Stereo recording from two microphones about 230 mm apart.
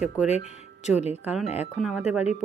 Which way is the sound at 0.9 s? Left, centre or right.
Left.